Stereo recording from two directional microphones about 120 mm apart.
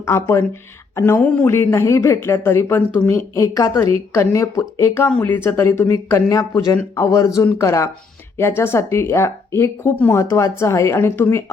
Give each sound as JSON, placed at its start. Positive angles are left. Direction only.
{"t": 0.0, "sound": "speech", "side_deg": 25}
{"t": 5.0, "sound": "speech", "side_deg": 15}